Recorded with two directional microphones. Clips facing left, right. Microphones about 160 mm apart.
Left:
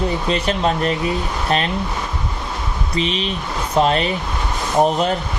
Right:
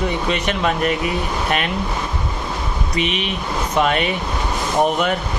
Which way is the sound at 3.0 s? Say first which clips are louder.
Left 1 dB; 30° left (ahead or behind).